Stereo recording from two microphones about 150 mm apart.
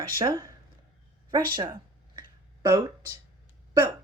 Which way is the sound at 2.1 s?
25° right (ahead or behind).